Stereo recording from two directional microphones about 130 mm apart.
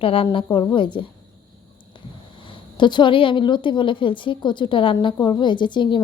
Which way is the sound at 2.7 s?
35° left (ahead or behind).